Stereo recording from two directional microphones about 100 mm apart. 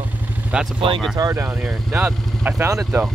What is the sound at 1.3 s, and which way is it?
Speech, 20° right (ahead or behind).